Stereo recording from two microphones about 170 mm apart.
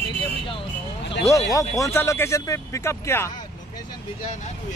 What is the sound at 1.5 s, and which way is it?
Speech, 20° left (ahead or behind).